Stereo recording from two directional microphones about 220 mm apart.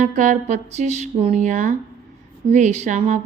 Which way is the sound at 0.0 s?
35° right (ahead or behind).